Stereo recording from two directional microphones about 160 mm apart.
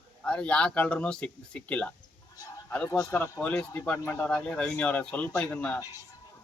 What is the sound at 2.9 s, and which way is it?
A man's voice, 20° left (ahead or behind).